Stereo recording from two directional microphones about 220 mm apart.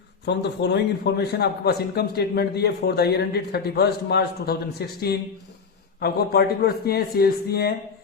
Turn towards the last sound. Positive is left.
turn(degrees=45)  # may be behind; listen again after turning